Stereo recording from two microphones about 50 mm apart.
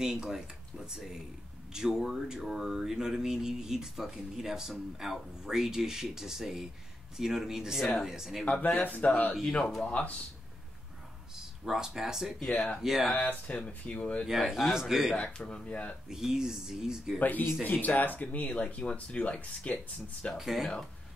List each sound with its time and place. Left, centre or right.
0.0 s speech: centre
8.5 s speech: left
8.7 s speech: left
9.8 s speech: left
11.3 s speech: centre
12.4 s speech: left
12.8 s speech: centre
13.1 s speech: left
13.5 s speech: left
14.5 s speech: centre
15.3 s speech: centre
16.1 s speech: centre
17.2 s speech: left
20.3 s speech: centre